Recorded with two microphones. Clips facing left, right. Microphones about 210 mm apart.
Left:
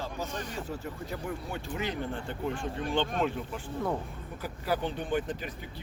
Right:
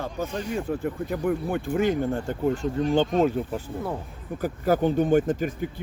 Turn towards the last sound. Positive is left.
turn(degrees=-45)  # may be behind; listen again after turning